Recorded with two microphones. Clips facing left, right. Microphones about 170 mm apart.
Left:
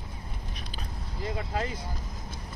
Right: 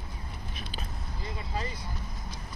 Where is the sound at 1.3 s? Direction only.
70° left (ahead or behind).